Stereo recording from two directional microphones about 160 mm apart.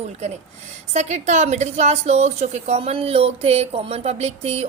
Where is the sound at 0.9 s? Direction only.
45° right (ahead or behind).